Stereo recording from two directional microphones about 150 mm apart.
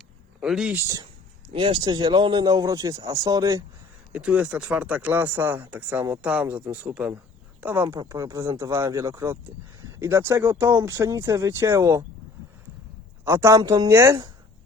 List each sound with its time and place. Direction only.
0.3 s speech: 5° right (ahead or behind)
0.8 s speech: 20° right (ahead or behind)
1.5 s speech: 35° right (ahead or behind)
4.1 s speech: 5° right (ahead or behind)
13.2 s speech: 20° right (ahead or behind)